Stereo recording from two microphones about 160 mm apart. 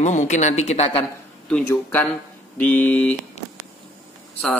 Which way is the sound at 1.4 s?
10° left (ahead or behind).